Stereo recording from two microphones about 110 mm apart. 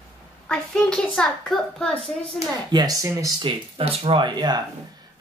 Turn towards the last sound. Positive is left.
turn(degrees=-40)  # may be behind; listen again after turning